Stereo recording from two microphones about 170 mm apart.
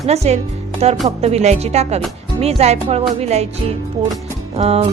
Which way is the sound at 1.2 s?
40° right (ahead or behind).